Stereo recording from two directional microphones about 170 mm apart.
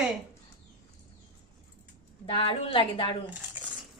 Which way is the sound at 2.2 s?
30° left (ahead or behind).